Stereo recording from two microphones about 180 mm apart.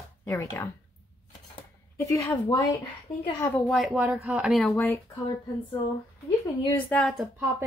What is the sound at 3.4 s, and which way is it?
Speech, 5° left (ahead or behind).